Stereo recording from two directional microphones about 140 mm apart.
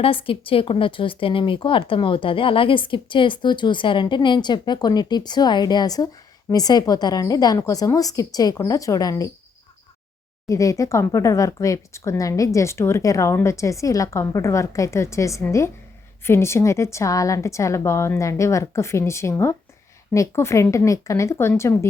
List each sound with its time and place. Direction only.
0.0 s a woman's voice: 40° left (ahead or behind)
10.4 s a woman's voice: 25° left (ahead or behind)